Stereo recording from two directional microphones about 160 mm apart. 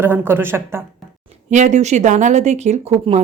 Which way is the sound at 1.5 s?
50° right (ahead or behind).